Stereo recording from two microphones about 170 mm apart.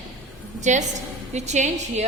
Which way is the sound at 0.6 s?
45° right (ahead or behind).